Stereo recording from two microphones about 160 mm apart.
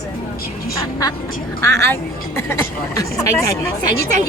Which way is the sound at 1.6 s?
15° left (ahead or behind).